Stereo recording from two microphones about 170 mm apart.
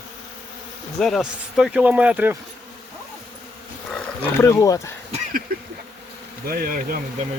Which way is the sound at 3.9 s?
10° left (ahead or behind).